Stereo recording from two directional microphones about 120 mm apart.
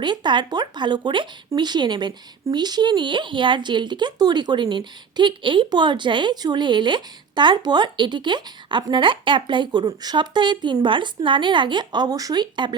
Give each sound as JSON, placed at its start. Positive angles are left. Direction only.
{"t": 0.0, "sound": "speech", "side_deg": -40}